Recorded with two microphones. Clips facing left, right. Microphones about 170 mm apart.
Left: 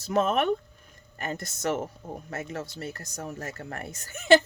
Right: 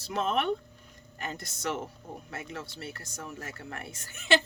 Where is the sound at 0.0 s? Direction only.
45° left (ahead or behind).